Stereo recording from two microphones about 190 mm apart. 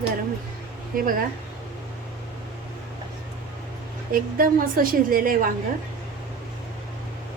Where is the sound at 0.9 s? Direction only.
45° right (ahead or behind).